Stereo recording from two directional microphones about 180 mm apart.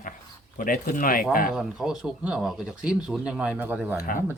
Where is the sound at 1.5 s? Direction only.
5° right (ahead or behind).